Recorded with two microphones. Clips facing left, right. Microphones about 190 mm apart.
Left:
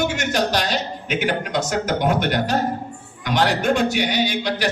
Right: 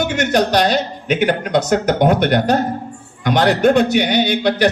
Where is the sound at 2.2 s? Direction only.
60° right (ahead or behind).